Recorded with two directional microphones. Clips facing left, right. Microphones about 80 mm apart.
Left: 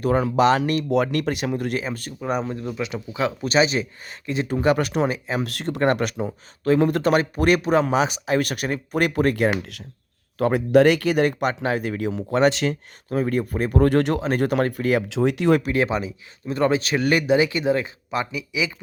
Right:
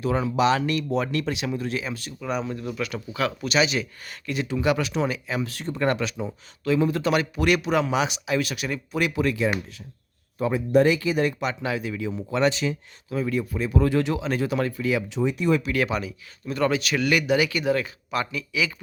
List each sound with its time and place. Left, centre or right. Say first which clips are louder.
0.0 s speech: left 4 dB; left
1.8 s speech: left 3 dB; left
2.7 s speech: left 2 dB; left
3.4 s speech: left 4 dB; left
4.4 s speech: left 4 dB; left
5.0 s speech: left 3 dB; left
5.4 s speech: left 3 dB; left
5.8 s speech: left 4 dB; left
7.0 s speech: left 4 dB; left
15.1 s speech: left 4 dB; left
15.7 s speech: left 3 dB; left